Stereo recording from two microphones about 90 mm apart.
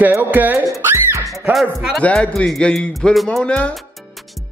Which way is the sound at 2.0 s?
15° left (ahead or behind).